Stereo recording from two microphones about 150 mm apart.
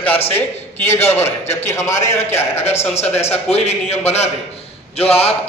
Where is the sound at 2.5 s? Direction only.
45° left (ahead or behind).